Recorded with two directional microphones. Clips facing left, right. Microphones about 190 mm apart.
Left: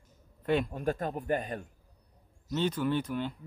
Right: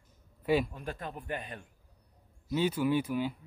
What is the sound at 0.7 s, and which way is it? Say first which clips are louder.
Speech: left 8 dB; 45° left (ahead or behind).